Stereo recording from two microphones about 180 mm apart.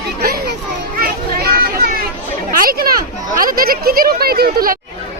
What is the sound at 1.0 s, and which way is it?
Children playing, 55° right (ahead or behind).